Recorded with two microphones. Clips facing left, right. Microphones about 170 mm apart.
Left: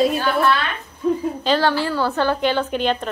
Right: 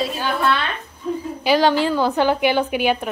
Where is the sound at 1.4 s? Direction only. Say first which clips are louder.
Right 4 dB; 15° right (ahead or behind).